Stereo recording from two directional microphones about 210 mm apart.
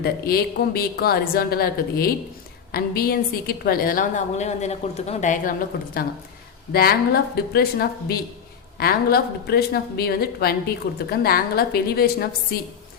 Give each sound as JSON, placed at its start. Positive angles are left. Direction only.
{"t": 0.0, "sound": "a woman's voice", "side_deg": 45}